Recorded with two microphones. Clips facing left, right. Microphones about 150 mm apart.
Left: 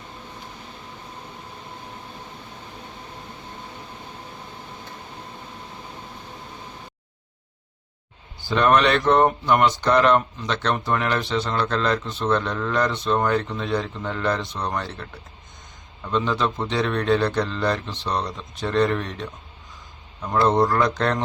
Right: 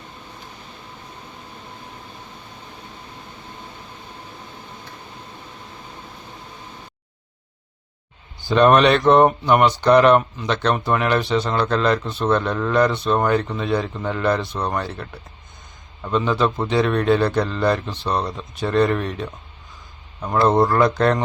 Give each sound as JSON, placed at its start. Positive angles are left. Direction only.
{"t": 8.4, "sound": "speech", "side_deg": -20}
{"t": 16.1, "sound": "speech", "side_deg": -10}
{"t": 20.7, "sound": "speech", "side_deg": -10}